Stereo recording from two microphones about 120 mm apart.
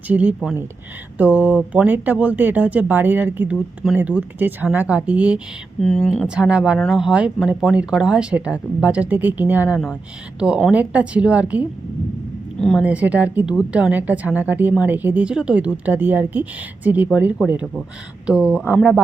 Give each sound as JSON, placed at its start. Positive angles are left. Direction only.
{"t": 0.1, "sound": "a woman's voice", "side_deg": -10}
{"t": 5.8, "sound": "speech", "side_deg": 5}
{"t": 6.2, "sound": "a woman's voice", "side_deg": -10}
{"t": 12.5, "sound": "a woman's voice", "side_deg": 5}
{"t": 12.8, "sound": "a woman's voice", "side_deg": -10}
{"t": 18.3, "sound": "a woman's voice", "side_deg": -10}